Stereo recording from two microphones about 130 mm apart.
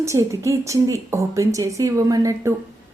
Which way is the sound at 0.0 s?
25° right (ahead or behind).